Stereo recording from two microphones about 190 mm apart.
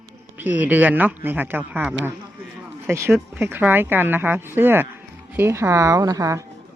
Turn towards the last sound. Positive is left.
turn(degrees=-20)  # may be behind; listen again after turning